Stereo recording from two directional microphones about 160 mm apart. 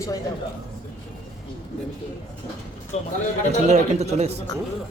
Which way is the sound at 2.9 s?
45° left (ahead or behind).